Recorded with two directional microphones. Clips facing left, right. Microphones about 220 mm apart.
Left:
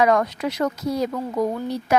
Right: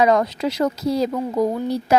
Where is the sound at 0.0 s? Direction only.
25° right (ahead or behind).